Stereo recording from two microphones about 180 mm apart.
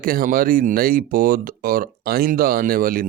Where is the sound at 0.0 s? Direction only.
55° right (ahead or behind).